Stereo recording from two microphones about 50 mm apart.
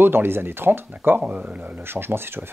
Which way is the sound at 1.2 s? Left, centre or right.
Right.